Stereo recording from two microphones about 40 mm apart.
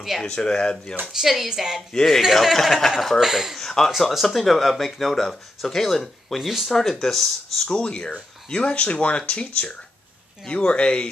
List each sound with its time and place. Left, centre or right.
0.2 s speech: left
1.1 s speech: centre
1.9 s speech: centre
3.2 s speech: centre
3.5 s speech: centre
4.1 s speech: centre
6.4 s speech: centre
6.7 s speech: centre
7.7 s speech: left